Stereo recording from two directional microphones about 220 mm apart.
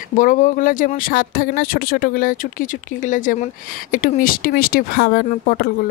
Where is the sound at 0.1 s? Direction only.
35° left (ahead or behind).